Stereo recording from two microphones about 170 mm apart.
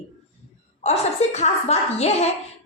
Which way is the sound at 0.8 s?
40° left (ahead or behind).